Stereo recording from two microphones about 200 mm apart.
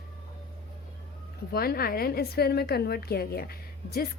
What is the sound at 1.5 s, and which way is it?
A woman's voice, 50° left (ahead or behind).